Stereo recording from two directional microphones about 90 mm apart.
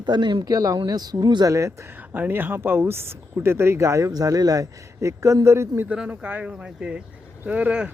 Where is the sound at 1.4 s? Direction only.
35° right (ahead or behind).